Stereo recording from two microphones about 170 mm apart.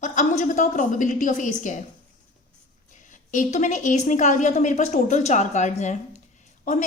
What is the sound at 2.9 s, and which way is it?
A woman's voice, 45° left (ahead or behind).